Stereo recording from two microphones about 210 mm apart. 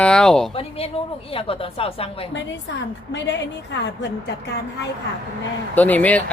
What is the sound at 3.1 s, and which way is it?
Speech, 55° left (ahead or behind).